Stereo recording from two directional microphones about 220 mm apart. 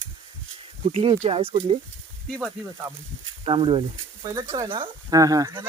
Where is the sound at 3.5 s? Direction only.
25° right (ahead or behind).